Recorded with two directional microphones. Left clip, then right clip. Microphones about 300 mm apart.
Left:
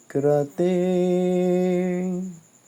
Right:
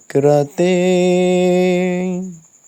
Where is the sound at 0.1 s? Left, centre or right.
Right.